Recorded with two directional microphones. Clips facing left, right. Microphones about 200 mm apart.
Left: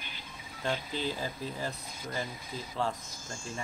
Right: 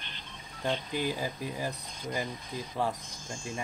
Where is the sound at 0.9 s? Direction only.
15° right (ahead or behind).